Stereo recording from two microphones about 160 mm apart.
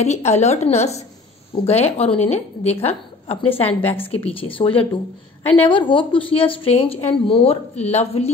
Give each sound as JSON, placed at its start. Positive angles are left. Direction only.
{"t": 0.0, "sound": "a woman's voice", "side_deg": 45}